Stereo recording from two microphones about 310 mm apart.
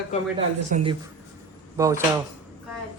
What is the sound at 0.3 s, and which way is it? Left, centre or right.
Speech, centre.